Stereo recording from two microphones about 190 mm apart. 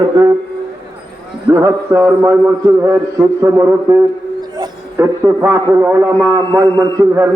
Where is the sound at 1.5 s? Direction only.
15° right (ahead or behind).